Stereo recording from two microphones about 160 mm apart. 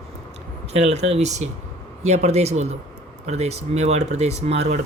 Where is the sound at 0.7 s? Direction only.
40° right (ahead or behind).